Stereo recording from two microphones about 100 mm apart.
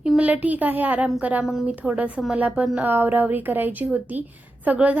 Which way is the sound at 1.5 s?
5° right (ahead or behind).